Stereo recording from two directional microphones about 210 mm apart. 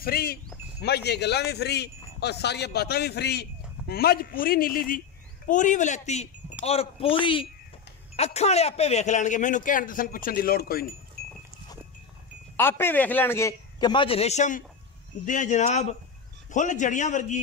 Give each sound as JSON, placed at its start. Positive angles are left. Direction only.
{"t": 0.0, "sound": "speech", "side_deg": 45}
{"t": 12.5, "sound": "a man's voice", "side_deg": 10}